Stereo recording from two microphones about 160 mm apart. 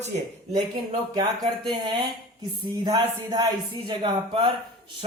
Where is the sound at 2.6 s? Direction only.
25° right (ahead or behind).